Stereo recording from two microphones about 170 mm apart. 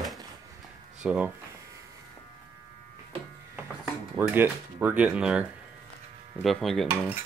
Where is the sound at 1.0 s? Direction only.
10° right (ahead or behind).